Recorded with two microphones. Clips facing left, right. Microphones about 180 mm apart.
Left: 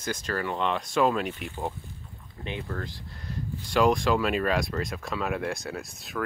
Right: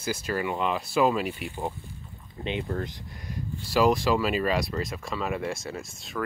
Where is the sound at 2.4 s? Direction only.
20° right (ahead or behind).